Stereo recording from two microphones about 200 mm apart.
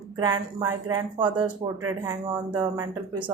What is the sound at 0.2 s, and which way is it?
Speech, 20° right (ahead or behind).